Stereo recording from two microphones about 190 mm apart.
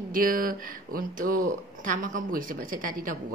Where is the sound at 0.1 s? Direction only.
50° right (ahead or behind).